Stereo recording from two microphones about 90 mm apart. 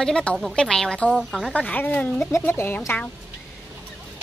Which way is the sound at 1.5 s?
15° left (ahead or behind).